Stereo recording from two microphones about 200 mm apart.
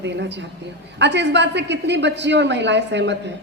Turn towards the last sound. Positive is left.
turn(degrees=-60)  # may be behind; listen again after turning